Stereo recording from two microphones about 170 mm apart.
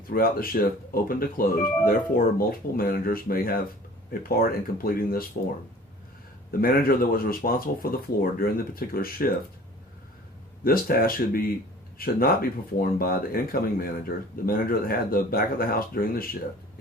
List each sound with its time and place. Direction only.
0.1 s speech: 60° left (ahead or behind)
6.5 s speech: 60° left (ahead or behind)
10.6 s speech: 60° left (ahead or behind)